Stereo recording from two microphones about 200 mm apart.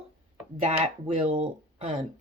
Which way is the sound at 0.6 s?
30° right (ahead or behind).